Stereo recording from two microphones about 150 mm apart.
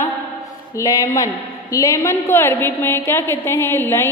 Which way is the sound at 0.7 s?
25° left (ahead or behind).